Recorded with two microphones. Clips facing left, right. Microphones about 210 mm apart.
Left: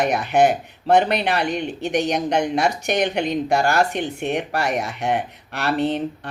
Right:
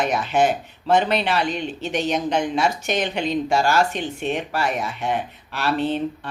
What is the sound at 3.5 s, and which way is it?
Speech, 60° left (ahead or behind).